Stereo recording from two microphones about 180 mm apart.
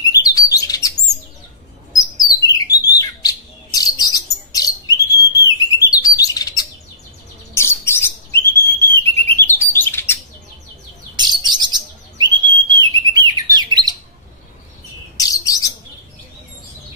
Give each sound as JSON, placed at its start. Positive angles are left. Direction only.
{"t": 0.0, "sound": "chirp", "side_deg": 20}
{"t": 2.4, "sound": "bird", "side_deg": 20}
{"t": 9.2, "sound": "chirp", "side_deg": 10}
{"t": 11.1, "sound": "bird", "side_deg": -25}
{"t": 15.1, "sound": "bird", "side_deg": 20}